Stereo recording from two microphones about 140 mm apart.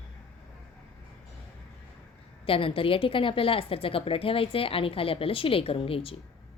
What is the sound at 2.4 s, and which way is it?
A woman's voice, 40° left (ahead or behind).